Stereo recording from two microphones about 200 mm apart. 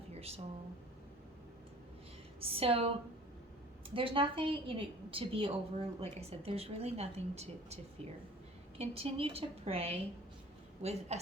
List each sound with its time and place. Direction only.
0.1 s a sound: 30° right (ahead or behind)
2.4 s a woman's voice: 30° right (ahead or behind)
8.8 s a woman's voice: 30° right (ahead or behind)